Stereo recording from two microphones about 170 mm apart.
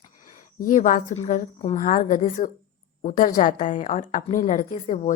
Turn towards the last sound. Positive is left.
turn(degrees=45)  # may be behind; listen again after turning